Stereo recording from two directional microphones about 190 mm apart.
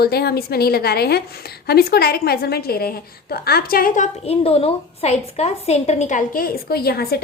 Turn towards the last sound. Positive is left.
turn(degrees=55)  # may be behind; listen again after turning